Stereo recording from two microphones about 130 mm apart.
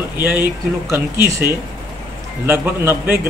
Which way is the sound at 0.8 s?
20° right (ahead or behind).